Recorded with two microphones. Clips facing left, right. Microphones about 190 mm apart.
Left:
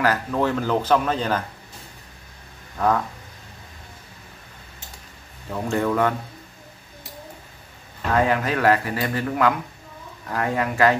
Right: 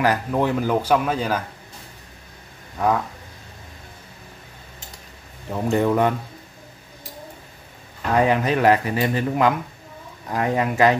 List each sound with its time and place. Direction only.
0.0 s speech: 15° right (ahead or behind)
5.5 s speech: 20° right (ahead or behind)
8.1 s speech: 20° right (ahead or behind)